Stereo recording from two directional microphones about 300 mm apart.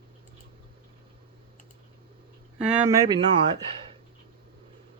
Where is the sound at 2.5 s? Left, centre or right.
Centre.